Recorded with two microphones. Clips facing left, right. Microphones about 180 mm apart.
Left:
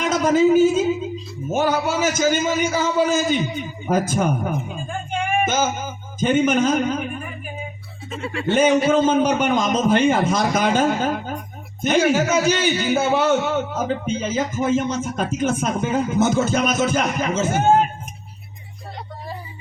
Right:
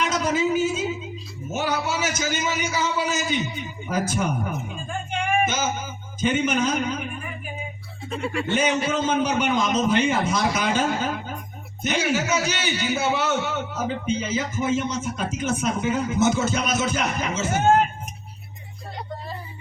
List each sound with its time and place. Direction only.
0.0 s a man's voice: 50° left (ahead or behind)
6.1 s a man's voice: 50° left (ahead or behind)
8.1 s speech: centre (ahead or behind)
8.4 s a man's voice: 55° left (ahead or behind)